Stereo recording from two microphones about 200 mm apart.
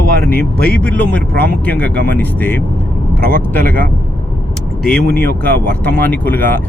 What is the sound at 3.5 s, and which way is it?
Speech, 10° left (ahead or behind).